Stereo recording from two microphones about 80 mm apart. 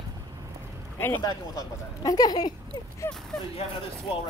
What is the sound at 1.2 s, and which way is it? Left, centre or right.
Speech, left.